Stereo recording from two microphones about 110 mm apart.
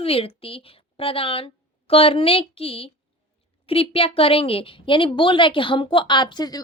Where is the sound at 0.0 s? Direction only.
60° left (ahead or behind).